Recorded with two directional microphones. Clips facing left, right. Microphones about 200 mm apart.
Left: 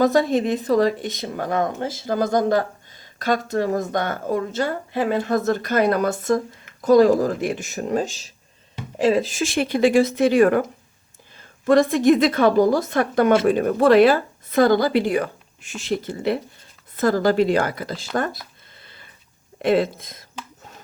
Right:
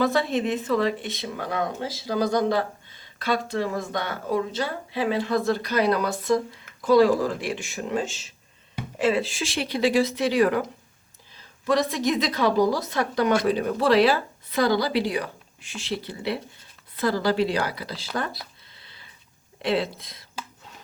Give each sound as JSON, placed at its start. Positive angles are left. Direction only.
{"t": 0.0, "sound": "speech", "side_deg": 40}